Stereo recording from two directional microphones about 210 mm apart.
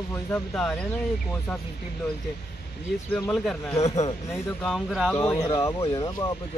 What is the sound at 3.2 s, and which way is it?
Speech, 10° left (ahead or behind).